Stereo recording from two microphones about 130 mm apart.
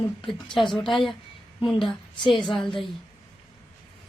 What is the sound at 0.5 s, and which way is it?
Speech, centre (ahead or behind).